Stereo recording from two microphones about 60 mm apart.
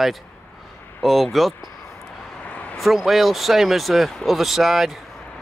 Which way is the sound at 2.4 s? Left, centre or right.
Left.